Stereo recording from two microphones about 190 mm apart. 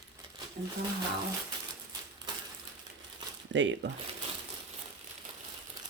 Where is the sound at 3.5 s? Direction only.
80° right.